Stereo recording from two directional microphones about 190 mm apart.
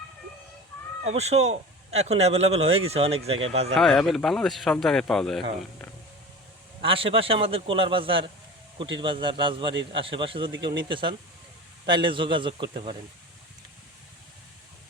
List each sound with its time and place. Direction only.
1.0 s a man's voice: 35° right (ahead or behind)
3.8 s speech: centre (ahead or behind)
6.8 s a man's voice: 30° right (ahead or behind)